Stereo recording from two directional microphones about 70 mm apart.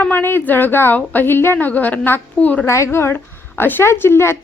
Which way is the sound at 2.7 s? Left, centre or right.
Left.